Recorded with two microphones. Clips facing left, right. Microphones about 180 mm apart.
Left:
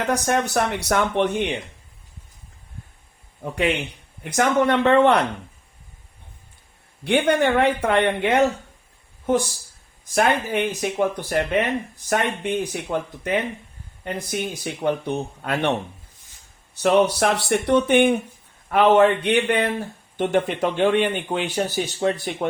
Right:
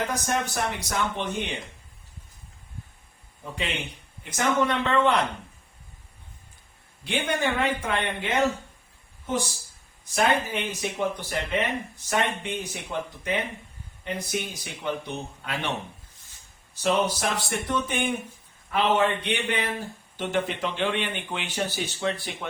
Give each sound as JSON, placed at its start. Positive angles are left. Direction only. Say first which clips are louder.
{"t": 0.1, "sound": "speech", "louder": "left 7 dB", "side_deg": 65}
{"t": 3.4, "sound": "speech", "louder": "left 9 dB", "side_deg": 65}
{"t": 7.0, "sound": "speech", "louder": "left 8 dB", "side_deg": 65}
{"t": 10.2, "sound": "speech", "louder": "left 4 dB", "side_deg": 55}
{"t": 16.8, "sound": "speech", "louder": "left 7 dB", "side_deg": 65}